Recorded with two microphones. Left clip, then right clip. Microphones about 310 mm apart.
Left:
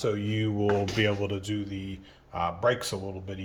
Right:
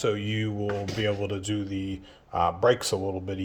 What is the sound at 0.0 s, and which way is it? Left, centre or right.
Speech, centre.